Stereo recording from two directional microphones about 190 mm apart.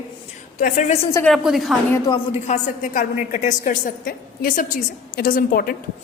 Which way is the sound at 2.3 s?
40° left (ahead or behind).